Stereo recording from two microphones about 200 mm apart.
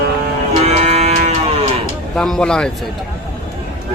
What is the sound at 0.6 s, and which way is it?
Moo, 30° right (ahead or behind).